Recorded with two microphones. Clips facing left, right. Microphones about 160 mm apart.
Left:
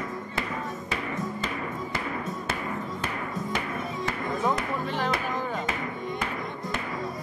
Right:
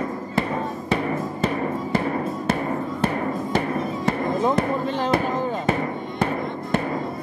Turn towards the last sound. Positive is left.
turn(degrees=-35)  # may be behind; listen again after turning